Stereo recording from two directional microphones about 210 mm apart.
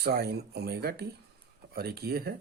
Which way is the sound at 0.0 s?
50° right (ahead or behind).